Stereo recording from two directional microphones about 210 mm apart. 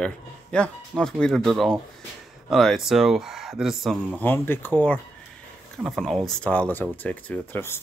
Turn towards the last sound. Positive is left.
turn(degrees=10)  # may be behind; listen again after turning